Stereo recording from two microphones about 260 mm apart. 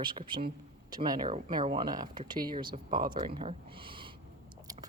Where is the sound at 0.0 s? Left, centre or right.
Centre.